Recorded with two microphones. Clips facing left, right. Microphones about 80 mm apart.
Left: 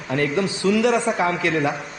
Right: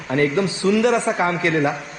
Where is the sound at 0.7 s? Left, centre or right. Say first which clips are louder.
Right 1 dB; right.